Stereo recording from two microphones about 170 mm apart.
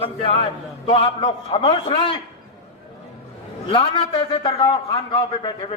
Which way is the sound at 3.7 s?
30° left (ahead or behind).